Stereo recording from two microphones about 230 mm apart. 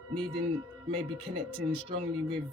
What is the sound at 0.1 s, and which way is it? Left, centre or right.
Speech, right.